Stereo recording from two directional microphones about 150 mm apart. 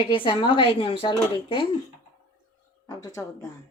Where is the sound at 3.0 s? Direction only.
20° left (ahead or behind).